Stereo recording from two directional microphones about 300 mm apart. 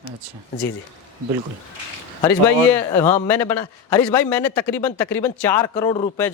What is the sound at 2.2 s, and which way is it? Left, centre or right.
A man's voice, centre.